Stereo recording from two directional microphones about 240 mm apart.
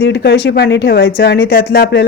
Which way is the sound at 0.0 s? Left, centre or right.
Left.